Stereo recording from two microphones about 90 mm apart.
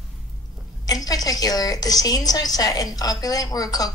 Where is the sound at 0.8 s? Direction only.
45° left (ahead or behind).